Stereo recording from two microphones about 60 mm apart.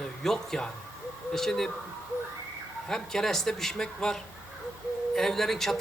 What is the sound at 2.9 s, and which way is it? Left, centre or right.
A man's voice, centre.